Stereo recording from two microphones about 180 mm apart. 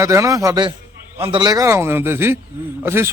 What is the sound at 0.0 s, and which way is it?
A man's voice, 15° right (ahead or behind).